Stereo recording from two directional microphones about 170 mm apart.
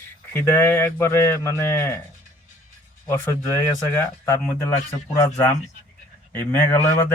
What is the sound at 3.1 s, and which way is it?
Speech, 15° left (ahead or behind).